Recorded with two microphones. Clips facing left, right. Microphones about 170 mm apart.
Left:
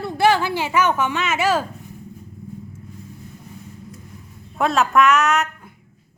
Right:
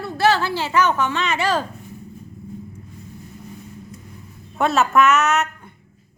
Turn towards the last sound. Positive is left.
turn(degrees=0)  # may be behind; listen again after turning